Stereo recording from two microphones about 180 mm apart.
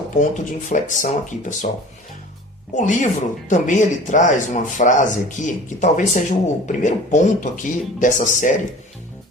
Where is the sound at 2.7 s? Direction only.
45° left (ahead or behind).